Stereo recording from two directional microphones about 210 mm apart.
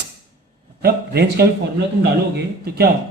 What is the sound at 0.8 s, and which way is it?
Speech, 50° right (ahead or behind).